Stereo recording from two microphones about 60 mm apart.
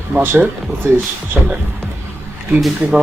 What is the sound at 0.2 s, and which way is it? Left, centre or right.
Speech, right.